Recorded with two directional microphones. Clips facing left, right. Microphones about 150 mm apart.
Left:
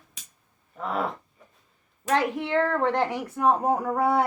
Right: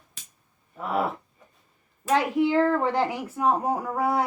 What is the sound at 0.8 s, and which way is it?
Speech, 5° right (ahead or behind).